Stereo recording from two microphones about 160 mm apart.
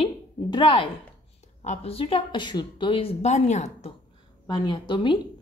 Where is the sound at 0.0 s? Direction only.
30° left (ahead or behind).